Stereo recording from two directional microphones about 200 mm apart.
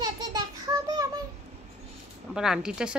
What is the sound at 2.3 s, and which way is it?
Speech, 5° right (ahead or behind).